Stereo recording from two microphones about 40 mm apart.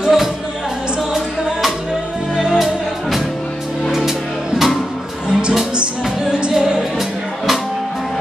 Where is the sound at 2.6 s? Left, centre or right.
Centre.